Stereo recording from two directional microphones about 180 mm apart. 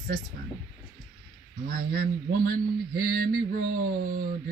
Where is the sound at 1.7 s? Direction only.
55° right (ahead or behind).